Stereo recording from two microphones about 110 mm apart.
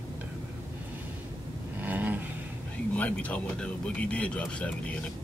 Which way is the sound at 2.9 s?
15° left (ahead or behind).